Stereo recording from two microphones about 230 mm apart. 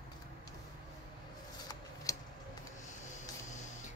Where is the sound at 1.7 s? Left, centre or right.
Centre.